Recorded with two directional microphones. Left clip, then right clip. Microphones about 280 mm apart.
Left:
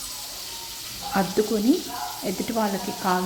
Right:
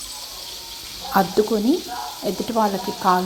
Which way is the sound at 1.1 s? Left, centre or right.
Centre.